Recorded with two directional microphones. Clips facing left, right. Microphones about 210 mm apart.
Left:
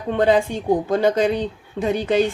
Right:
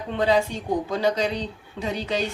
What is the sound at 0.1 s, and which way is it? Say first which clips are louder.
Speech: left 5 dB; 50° left (ahead or behind).